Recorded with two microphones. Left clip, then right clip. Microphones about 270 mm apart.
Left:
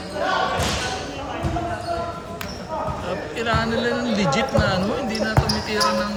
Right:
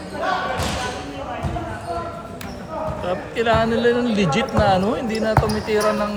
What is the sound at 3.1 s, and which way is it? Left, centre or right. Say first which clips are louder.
Speech: right 5 dB; right.